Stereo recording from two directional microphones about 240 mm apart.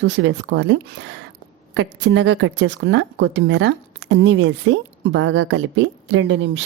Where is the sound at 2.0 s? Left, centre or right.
Right.